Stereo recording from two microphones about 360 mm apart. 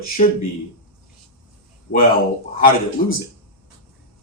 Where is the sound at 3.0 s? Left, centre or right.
Left.